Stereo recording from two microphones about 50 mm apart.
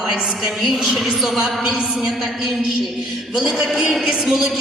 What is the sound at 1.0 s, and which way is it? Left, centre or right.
A woman's voice, centre.